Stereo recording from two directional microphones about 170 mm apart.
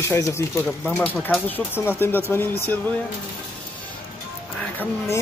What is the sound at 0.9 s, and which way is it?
Speech, 5° left (ahead or behind).